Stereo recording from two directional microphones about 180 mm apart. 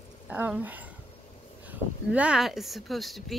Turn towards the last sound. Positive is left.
turn(degrees=0)  # may be behind; listen again after turning